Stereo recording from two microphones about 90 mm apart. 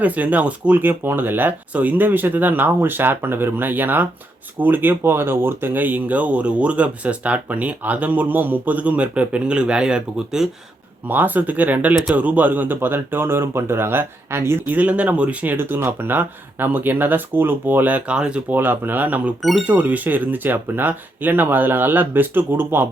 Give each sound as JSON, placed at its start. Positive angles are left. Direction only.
{"t": 0.0, "sound": "speech", "side_deg": -15}
{"t": 11.1, "sound": "speech", "side_deg": -20}
{"t": 14.8, "sound": "speech", "side_deg": -15}
{"t": 15.5, "sound": "speech", "side_deg": -25}
{"t": 18.5, "sound": "speech", "side_deg": -20}
{"t": 19.4, "sound": "speech", "side_deg": 0}
{"t": 19.6, "sound": "speech", "side_deg": -15}